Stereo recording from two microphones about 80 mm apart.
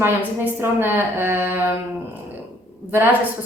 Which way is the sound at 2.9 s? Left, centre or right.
Right.